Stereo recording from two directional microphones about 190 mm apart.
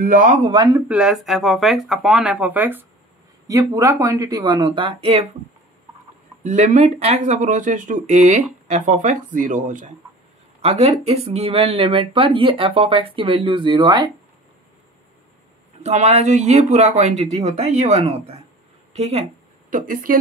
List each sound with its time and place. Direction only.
0.0 s speech: 40° right (ahead or behind)
0.7 s speech: 5° right (ahead or behind); by 5.2 s 30° right (ahead or behind)
6.4 s speech: 40° right (ahead or behind)
10.6 s speech: 30° right (ahead or behind)
15.8 s speech: 35° right (ahead or behind)
19.7 s speech: 45° right (ahead or behind)